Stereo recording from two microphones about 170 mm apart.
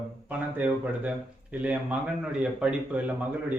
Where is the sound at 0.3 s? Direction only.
10° right (ahead or behind).